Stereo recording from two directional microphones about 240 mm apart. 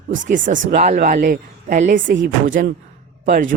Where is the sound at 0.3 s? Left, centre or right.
Right.